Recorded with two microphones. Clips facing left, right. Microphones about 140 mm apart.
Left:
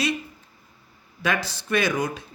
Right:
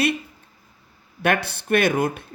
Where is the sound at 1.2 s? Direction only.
60° right (ahead or behind).